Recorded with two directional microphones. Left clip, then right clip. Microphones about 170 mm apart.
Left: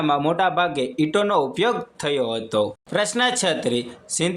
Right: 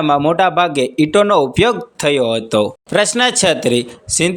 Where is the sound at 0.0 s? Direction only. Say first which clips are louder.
Right 7 dB; 35° right (ahead or behind).